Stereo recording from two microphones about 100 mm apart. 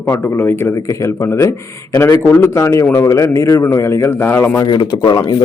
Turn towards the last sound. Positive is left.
turn(degrees=45)  # may be behind; listen again after turning